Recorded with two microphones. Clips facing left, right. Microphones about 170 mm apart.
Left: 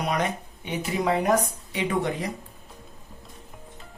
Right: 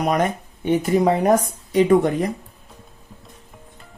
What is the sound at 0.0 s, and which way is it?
Speech, 45° right (ahead or behind).